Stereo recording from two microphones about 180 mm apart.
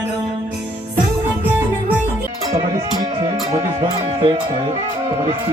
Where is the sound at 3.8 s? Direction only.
25° right (ahead or behind).